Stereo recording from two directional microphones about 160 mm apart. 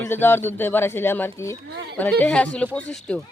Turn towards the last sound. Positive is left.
turn(degrees=5)  # may be behind; listen again after turning